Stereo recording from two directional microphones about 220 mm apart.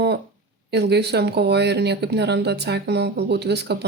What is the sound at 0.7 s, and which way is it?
Speech, 50° right (ahead or behind).